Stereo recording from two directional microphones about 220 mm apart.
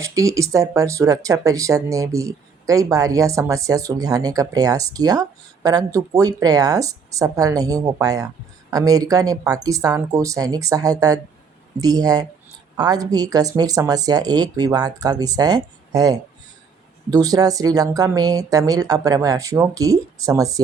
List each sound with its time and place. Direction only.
0.0 s speech: 15° right (ahead or behind)